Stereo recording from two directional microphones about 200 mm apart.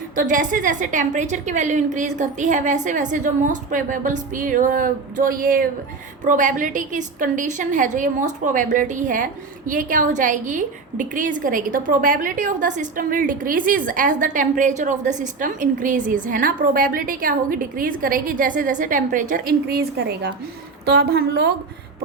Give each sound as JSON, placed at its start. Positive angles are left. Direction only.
{"t": 0.2, "sound": "a woman's voice", "side_deg": -40}